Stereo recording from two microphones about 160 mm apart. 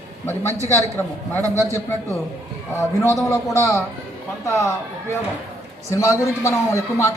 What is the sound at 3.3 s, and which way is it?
A man's voice, 20° left (ahead or behind).